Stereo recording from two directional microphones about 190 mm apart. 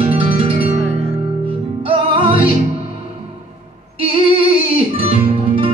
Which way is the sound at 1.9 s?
25° right (ahead or behind).